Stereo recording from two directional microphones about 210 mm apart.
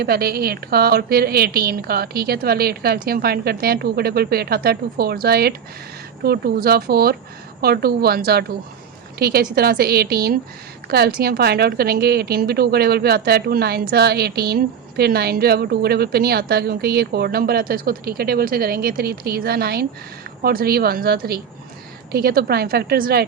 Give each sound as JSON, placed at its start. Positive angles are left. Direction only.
{"t": 0.0, "sound": "a woman's voice", "side_deg": -45}